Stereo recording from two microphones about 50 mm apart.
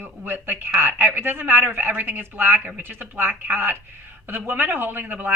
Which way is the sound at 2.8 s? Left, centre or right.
Right.